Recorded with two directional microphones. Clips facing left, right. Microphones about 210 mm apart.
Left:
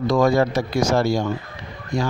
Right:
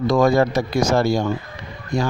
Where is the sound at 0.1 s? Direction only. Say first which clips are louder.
Right 1 dB; 50° right (ahead or behind).